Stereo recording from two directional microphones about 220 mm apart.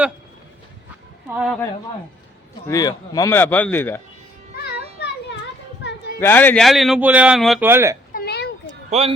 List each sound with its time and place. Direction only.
1.4 s speech: centre (ahead or behind)
2.6 s speech: 15° left (ahead or behind)
5.8 s a sound: 50° left (ahead or behind)
6.1 s speech: 10° left (ahead or behind)
7.7 s speech: 10° right (ahead or behind)
8.1 s a sound: 45° left (ahead or behind)
8.9 s speech: 25° right (ahead or behind)